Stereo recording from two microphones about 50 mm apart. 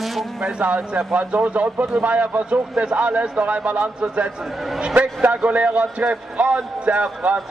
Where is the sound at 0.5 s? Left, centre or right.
Right.